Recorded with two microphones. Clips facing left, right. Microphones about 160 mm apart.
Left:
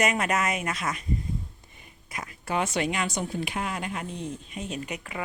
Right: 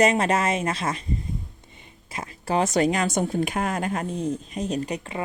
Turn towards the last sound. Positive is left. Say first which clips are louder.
# right 6 dB
turn(degrees=-30)  # may be behind; listen again after turning